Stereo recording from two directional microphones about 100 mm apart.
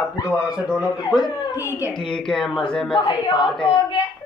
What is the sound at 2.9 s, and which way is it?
Speech, 55° left (ahead or behind).